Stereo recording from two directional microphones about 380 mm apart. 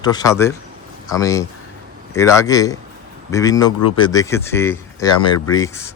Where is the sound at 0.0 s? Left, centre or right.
Centre.